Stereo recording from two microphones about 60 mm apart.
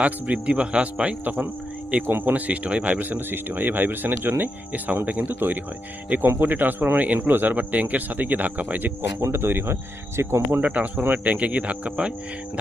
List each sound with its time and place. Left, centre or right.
0.0 s speech: right
9.2 s speech: right
10.6 s speech: right